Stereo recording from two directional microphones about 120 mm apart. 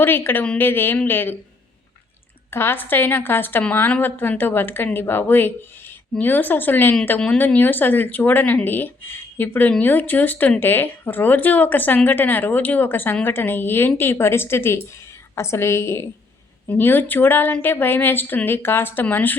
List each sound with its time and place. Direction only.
0.0 s speech: 20° left (ahead or behind)
2.5 s a woman's voice: 20° left (ahead or behind)